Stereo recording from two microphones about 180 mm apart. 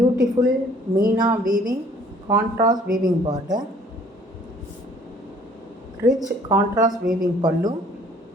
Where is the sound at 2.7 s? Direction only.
50° right (ahead or behind).